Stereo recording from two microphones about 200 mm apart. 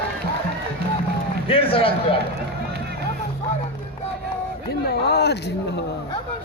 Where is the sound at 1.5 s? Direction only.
30° left (ahead or behind).